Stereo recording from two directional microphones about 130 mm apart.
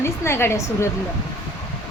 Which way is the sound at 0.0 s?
20° left (ahead or behind).